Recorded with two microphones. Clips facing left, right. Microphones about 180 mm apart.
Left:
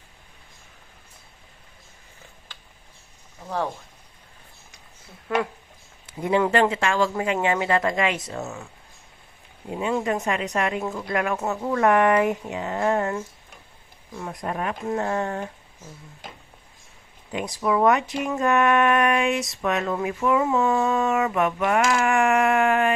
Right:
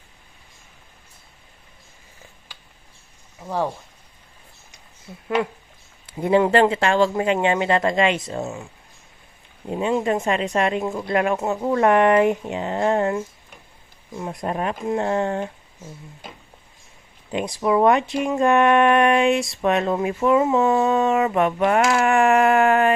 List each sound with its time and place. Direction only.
6.1 s speech: 30° right (ahead or behind)
9.7 s speech: 25° right (ahead or behind)
17.3 s speech: 25° right (ahead or behind)